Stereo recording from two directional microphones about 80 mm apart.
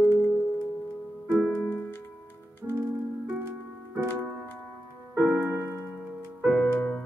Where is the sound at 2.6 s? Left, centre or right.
Right.